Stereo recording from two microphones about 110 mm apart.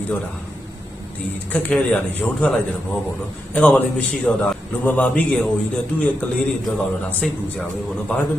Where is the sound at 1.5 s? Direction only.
15° left (ahead or behind).